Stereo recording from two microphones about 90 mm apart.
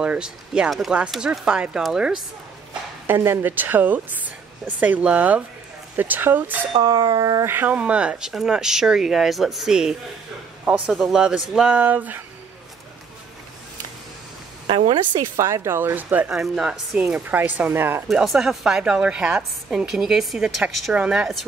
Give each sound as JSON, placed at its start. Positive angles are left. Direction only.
{"t": 0.0, "sound": "a woman's voice", "side_deg": -10}
{"t": 3.1, "sound": "speech", "side_deg": -20}
{"t": 6.8, "sound": "speech", "side_deg": -55}
{"t": 7.2, "sound": "speech", "side_deg": -45}
{"t": 7.4, "sound": "a woman's voice", "side_deg": -20}
{"t": 15.1, "sound": "speech", "side_deg": -35}
{"t": 16.3, "sound": "speech", "side_deg": -5}
{"t": 17.3, "sound": "speech", "side_deg": -20}
{"t": 18.0, "sound": "a woman's voice", "side_deg": 0}